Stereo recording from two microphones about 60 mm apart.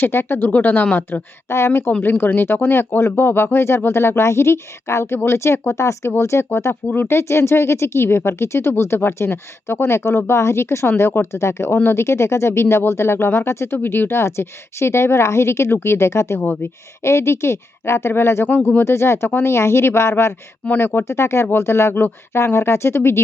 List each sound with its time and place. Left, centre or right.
0.0 s speech: left
13.7 s speech: left
20.7 s speech: left
21.0 s speech: left